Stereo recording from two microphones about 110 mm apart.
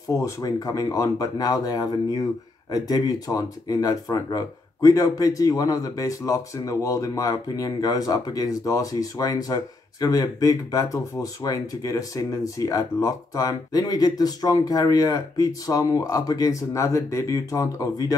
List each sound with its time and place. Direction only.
0.1 s speech: 30° left (ahead or behind)